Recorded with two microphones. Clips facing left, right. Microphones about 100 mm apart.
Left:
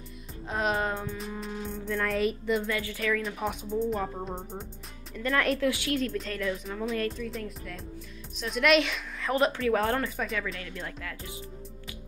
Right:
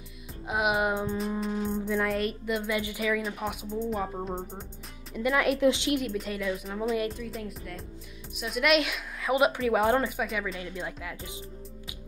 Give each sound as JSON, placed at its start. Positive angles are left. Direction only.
{"t": 0.5, "sound": "speech", "side_deg": -10}
{"t": 1.6, "sound": "music", "side_deg": -30}
{"t": 1.9, "sound": "speech", "side_deg": 0}
{"t": 2.7, "sound": "speech", "side_deg": -15}
{"t": 5.6, "sound": "speech", "side_deg": -20}
{"t": 6.0, "sound": "speech", "side_deg": -5}
{"t": 10.1, "sound": "speech", "side_deg": -5}